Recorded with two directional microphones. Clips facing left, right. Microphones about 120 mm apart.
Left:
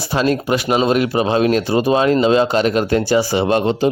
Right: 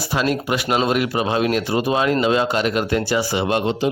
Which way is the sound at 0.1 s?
30° left (ahead or behind).